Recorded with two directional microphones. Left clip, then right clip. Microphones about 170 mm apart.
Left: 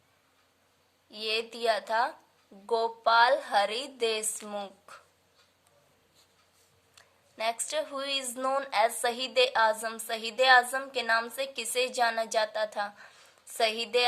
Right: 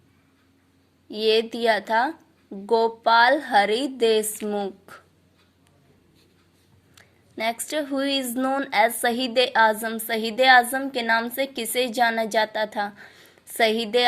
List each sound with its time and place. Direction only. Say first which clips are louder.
1.1 s a woman's voice: right 11 dB; 30° right (ahead or behind)
6.9 s a woman's voice: right 7 dB; 20° right (ahead or behind)